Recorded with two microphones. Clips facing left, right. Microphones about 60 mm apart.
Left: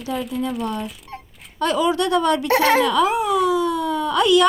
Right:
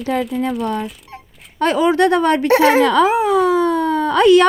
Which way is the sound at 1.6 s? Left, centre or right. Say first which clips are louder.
Right 5 dB; right.